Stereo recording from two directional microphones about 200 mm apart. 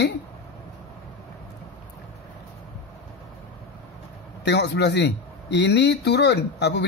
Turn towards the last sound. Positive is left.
turn(degrees=55)  # may be behind; listen again after turning